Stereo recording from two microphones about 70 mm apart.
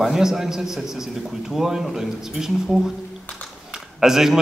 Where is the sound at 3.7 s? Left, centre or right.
Centre.